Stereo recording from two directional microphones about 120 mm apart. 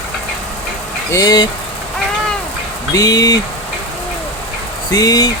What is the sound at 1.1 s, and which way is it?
Speech, 35° left (ahead or behind).